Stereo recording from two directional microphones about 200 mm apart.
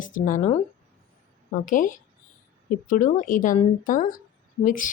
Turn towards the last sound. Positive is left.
turn(degrees=40)  # may be behind; listen again after turning